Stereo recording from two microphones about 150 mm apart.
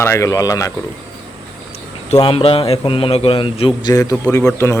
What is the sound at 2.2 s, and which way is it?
A man's voice, 35° left (ahead or behind).